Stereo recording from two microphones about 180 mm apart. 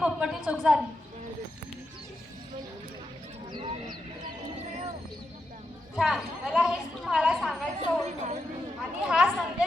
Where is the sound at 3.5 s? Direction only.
25° right (ahead or behind).